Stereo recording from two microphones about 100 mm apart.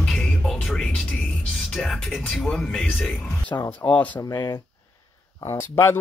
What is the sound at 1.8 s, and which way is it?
Speech, 10° left (ahead or behind).